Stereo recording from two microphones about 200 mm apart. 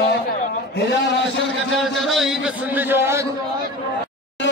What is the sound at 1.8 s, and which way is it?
A man's voice, centre (ahead or behind).